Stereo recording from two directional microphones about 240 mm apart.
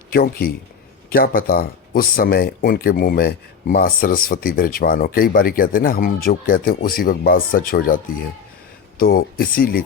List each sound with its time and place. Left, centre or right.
0.1 s speech: left